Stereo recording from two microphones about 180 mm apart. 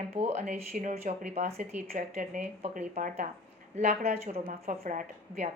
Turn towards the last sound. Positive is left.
turn(degrees=-45)  # may be behind; listen again after turning